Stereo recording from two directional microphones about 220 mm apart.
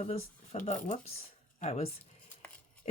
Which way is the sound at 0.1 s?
30° left (ahead or behind).